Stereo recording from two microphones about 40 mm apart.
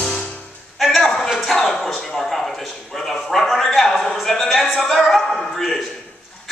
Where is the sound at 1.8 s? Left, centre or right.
Centre.